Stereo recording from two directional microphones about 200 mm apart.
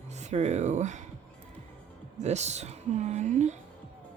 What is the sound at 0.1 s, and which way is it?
Speech, 35° right (ahead or behind).